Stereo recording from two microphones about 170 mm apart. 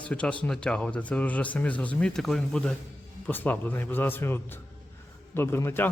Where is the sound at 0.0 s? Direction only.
5° left (ahead or behind).